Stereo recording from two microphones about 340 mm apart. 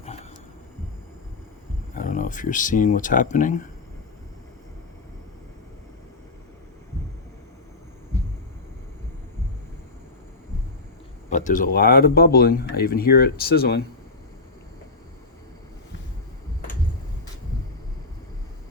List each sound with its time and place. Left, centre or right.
2.0 s speech: left
11.3 s speech: left